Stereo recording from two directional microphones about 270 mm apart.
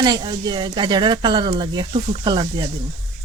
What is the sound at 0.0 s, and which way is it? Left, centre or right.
Speech, centre.